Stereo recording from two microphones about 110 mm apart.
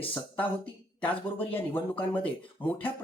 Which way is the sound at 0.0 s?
15° left (ahead or behind).